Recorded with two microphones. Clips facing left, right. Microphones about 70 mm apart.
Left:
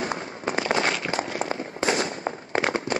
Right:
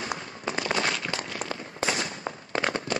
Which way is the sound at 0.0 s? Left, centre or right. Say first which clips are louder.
Left 4 dB; left.